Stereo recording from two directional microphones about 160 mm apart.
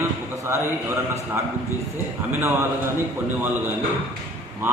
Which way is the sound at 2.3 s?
15° right (ahead or behind).